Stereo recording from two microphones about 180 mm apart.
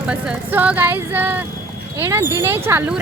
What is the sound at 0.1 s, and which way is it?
Speech, 5° right (ahead or behind).